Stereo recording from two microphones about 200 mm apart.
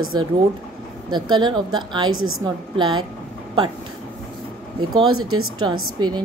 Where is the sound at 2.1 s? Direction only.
90° right.